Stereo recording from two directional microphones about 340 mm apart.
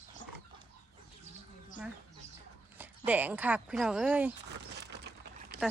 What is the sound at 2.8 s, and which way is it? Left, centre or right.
Speech, centre.